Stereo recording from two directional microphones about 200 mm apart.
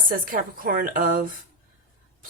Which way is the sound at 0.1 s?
45° right (ahead or behind).